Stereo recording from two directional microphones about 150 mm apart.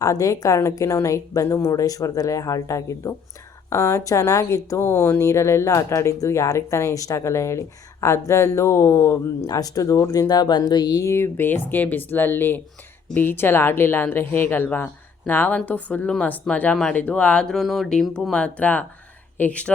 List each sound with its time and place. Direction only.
0.0 s speech: 20° left (ahead or behind)